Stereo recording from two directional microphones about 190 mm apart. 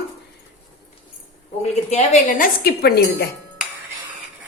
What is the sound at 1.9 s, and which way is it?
A woman's voice, 40° left (ahead or behind).